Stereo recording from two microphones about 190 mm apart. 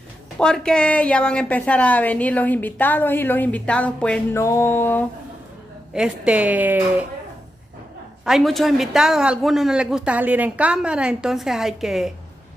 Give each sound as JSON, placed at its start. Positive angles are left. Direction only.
{"t": 0.4, "sound": "a woman's voice", "side_deg": 5}
{"t": 5.9, "sound": "speech", "side_deg": -5}
{"t": 8.3, "sound": "speech", "side_deg": 0}